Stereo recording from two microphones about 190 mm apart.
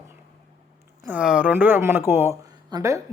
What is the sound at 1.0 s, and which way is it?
Speech, 5° right (ahead or behind).